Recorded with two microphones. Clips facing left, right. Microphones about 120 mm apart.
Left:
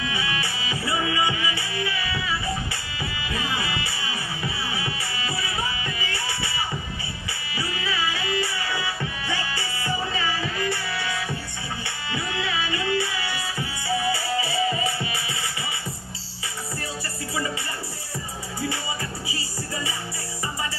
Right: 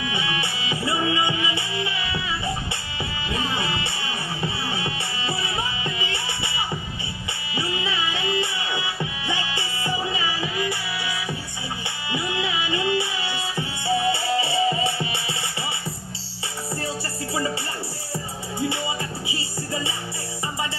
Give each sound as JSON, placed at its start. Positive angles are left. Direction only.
{"t": 0.0, "sound": "music", "side_deg": -25}
{"t": 7.5, "sound": "music", "side_deg": -20}